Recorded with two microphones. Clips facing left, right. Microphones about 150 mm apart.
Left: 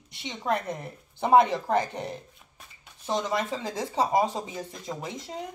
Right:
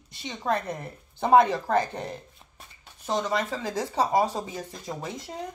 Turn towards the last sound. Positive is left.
turn(degrees=20)  # may be behind; listen again after turning